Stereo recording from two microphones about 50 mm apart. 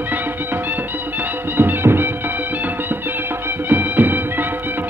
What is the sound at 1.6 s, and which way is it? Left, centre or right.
Music, right.